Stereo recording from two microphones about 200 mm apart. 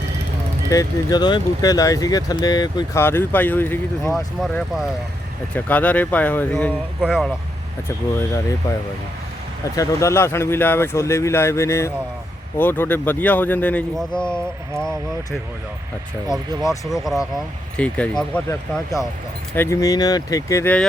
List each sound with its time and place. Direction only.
0.7 s speech: 20° left (ahead or behind)
7.0 s speech: 5° right (ahead or behind)
7.9 s speech: 15° left (ahead or behind)
9.7 s speech: 15° left (ahead or behind)
16.9 s speech: centre (ahead or behind)
19.5 s speech: 15° left (ahead or behind)